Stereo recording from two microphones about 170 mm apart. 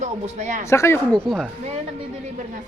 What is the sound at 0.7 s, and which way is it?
Speech, 15° left (ahead or behind).